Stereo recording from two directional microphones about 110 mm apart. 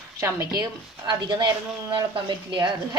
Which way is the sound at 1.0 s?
40° right (ahead or behind).